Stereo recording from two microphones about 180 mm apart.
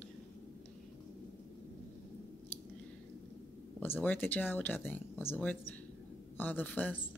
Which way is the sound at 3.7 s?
10° left (ahead or behind).